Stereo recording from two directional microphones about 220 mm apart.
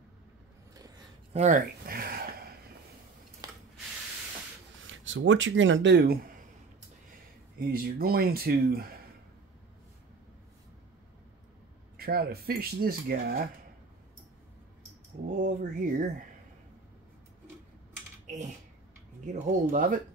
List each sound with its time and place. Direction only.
1.3 s a sound: 35° right (ahead or behind)
3.4 s rub: 15° right (ahead or behind)
4.8 s speech: 60° right (ahead or behind)
7.5 s speech: 45° right (ahead or behind)
12.0 s speech: 45° right (ahead or behind)
15.3 s speech: 40° right (ahead or behind)
18.2 s typing: 35° right (ahead or behind)
19.2 s speech: 35° right (ahead or behind)